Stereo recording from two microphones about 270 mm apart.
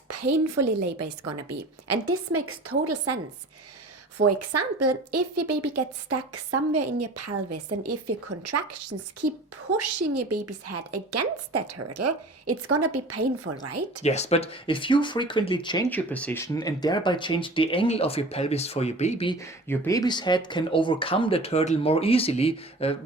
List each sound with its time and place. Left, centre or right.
0.1 s a woman's voice: right
2.0 s a woman's voice: right
4.2 s a woman's voice: right
10.2 s a woman's voice: right
14.0 s speech: left